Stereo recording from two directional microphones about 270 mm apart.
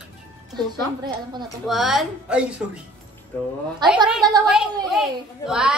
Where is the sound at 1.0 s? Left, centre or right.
Centre.